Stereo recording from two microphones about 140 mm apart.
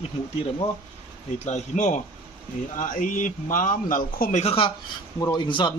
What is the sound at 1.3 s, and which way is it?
A man's voice, 55° left (ahead or behind).